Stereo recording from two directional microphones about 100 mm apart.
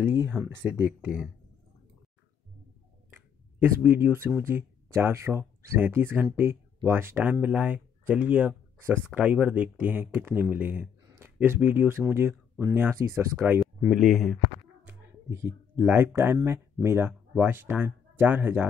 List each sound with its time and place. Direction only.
0.0 s speech: 20° right (ahead or behind)
3.5 s speech: 20° right (ahead or behind)
13.7 s speech: 5° right (ahead or behind)
14.9 s a sound: 25° right (ahead or behind)
15.8 s speech: 15° right (ahead or behind)